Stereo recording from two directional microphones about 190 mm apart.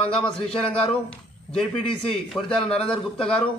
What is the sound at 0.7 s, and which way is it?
Speech, 30° left (ahead or behind).